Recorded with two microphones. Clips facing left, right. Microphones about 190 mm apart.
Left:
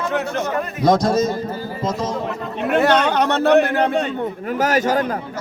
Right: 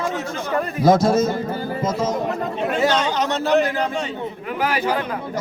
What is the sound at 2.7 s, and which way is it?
Speech, 60° left (ahead or behind).